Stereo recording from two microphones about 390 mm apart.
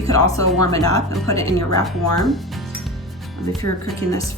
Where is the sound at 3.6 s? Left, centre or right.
Left.